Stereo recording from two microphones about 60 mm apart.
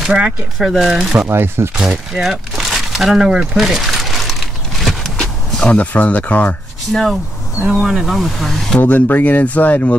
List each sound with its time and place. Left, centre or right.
0.6 s speech: centre
1.3 s speech: right
2.1 s a sound: centre
5.1 s speech: centre
6.9 s speech: centre
7.6 s speech: centre
8.7 s speech: left